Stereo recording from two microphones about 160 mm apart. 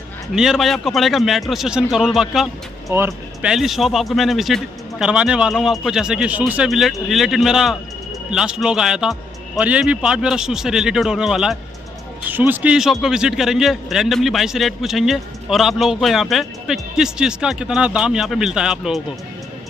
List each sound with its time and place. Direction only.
0.3 s a man's voice: centre (ahead or behind)
2.9 s speech: 15° right (ahead or behind)
3.5 s a man's voice: centre (ahead or behind)